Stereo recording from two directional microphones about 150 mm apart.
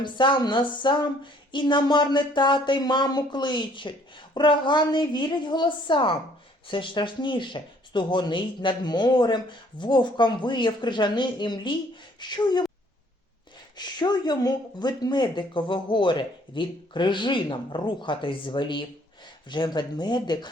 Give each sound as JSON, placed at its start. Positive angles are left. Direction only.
{"t": 0.0, "sound": "speech", "side_deg": 30}
{"t": 13.7, "sound": "speech", "side_deg": 30}